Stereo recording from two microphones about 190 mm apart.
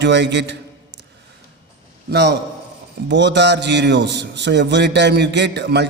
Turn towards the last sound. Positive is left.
turn(degrees=-65)  # may be behind; listen again after turning